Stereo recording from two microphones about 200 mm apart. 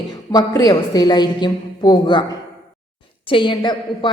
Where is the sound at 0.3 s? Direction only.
20° left (ahead or behind).